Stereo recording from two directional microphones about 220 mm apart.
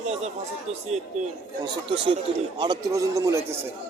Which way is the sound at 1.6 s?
20° right (ahead or behind).